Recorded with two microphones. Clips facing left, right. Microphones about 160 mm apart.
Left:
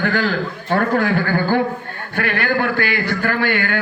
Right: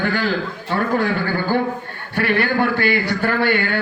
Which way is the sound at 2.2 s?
55° left (ahead or behind).